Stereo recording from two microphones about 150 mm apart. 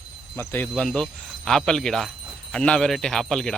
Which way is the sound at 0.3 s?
15° left (ahead or behind).